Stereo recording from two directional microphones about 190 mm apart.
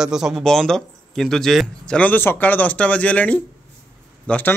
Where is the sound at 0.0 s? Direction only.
5° right (ahead or behind).